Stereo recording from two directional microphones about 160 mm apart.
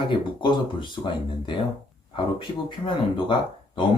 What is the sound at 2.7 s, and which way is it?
Speech, 30° left (ahead or behind).